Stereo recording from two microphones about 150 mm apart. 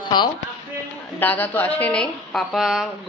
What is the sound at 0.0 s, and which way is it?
Speech, 30° left (ahead or behind).